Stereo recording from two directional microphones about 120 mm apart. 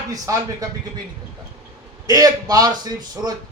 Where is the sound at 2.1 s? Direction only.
30° right (ahead or behind).